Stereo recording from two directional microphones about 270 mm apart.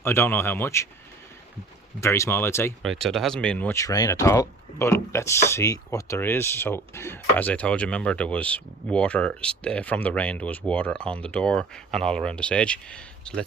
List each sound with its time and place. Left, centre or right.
0.0 s speech: centre
2.0 s speech: centre